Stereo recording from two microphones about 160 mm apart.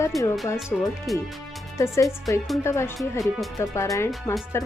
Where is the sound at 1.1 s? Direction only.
Centre (ahead or behind).